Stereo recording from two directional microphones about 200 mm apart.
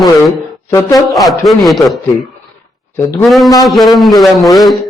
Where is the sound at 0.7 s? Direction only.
15° left (ahead or behind).